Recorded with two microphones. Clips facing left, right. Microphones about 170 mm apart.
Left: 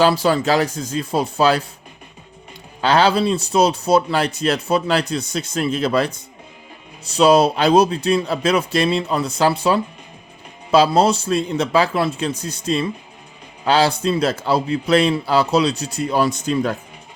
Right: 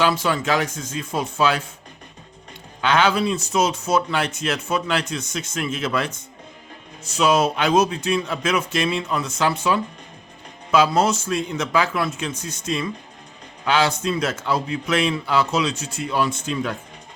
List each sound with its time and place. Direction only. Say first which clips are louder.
0.0 s speech: left 5 dB; 35° left (ahead or behind)
2.8 s speech: left 3 dB; 35° left (ahead or behind)